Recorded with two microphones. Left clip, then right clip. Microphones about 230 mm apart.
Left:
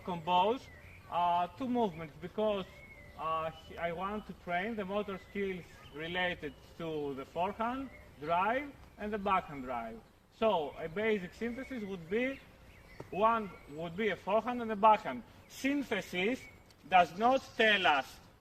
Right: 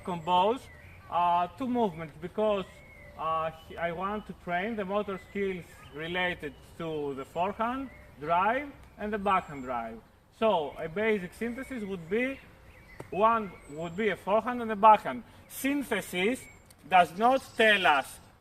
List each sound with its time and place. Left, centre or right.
0.0 s a man's voice: centre